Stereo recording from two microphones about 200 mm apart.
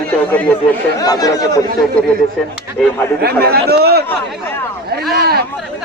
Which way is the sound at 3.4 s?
50° right (ahead or behind).